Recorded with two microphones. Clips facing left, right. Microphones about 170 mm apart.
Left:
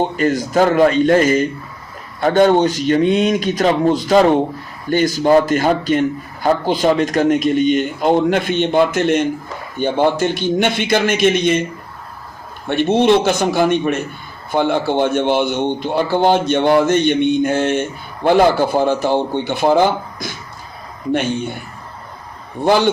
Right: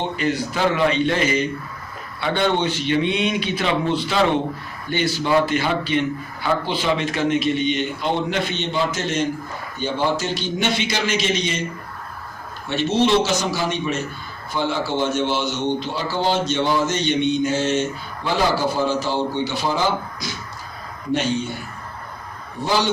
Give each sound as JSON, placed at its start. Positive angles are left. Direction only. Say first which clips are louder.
{"t": 0.0, "sound": "a man's voice", "louder": "left 6 dB", "side_deg": 45}
{"t": 12.6, "sound": "speech", "louder": "left 6 dB", "side_deg": 55}
{"t": 22.6, "sound": "speech", "louder": "left 7 dB", "side_deg": 55}